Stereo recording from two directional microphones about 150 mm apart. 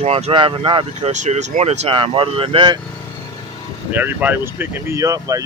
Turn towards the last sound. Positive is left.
turn(degrees=-20)  # may be behind; listen again after turning